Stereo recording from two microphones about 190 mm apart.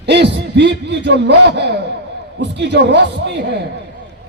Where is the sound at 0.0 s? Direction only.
65° right (ahead or behind).